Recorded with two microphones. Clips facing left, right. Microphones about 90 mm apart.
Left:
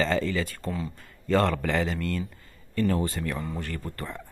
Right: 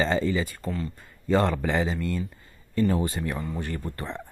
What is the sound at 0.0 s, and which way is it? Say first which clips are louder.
Speech: right 1 dB; 20° right (ahead or behind).